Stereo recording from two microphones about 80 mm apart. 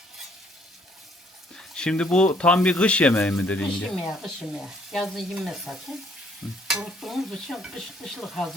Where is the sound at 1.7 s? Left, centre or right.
Centre.